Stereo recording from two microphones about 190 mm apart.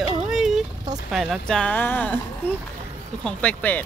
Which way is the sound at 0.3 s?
Centre (ahead or behind).